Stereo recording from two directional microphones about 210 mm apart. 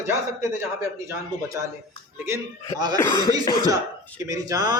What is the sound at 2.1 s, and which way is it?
Speech, 10° right (ahead or behind).